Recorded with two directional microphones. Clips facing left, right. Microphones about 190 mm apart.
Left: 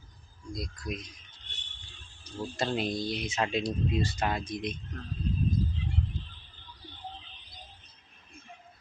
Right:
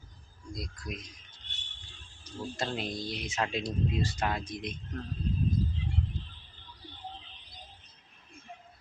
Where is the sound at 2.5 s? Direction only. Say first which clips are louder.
Left 5 dB; 5° left (ahead or behind).